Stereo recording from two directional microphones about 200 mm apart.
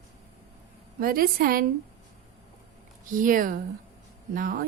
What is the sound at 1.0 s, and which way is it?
Speech, 45° right (ahead or behind).